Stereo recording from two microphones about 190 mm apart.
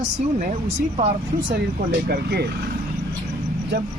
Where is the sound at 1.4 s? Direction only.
60° right (ahead or behind).